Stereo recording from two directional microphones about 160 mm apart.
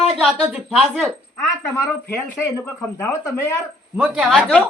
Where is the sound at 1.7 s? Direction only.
15° left (ahead or behind).